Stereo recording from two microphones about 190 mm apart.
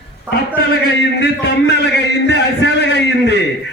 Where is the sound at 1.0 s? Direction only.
60° left (ahead or behind).